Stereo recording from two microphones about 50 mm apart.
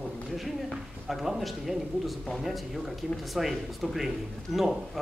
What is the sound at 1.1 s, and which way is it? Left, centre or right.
Speech, centre.